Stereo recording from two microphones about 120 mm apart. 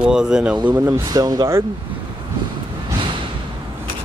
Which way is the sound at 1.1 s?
30° right (ahead or behind).